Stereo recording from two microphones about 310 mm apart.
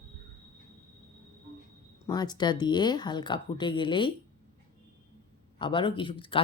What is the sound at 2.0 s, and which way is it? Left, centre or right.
Speech, centre.